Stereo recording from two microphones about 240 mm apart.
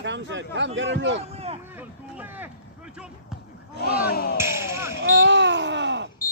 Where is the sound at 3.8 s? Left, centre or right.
Left.